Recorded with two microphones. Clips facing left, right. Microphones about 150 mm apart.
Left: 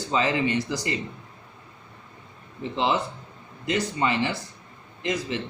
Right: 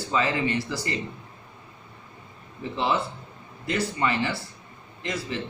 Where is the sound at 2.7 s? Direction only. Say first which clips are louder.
Left 1 dB; 20° left (ahead or behind).